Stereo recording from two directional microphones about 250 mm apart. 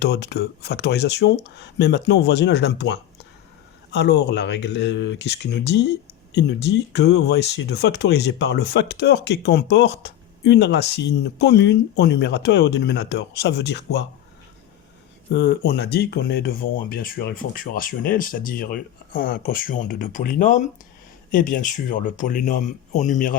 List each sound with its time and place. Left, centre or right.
0.0 s speech: left
15.3 s speech: left